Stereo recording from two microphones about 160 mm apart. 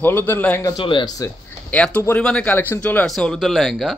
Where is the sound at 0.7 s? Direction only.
30° left (ahead or behind).